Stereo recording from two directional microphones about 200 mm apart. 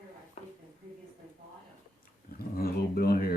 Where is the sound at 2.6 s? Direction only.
50° left (ahead or behind).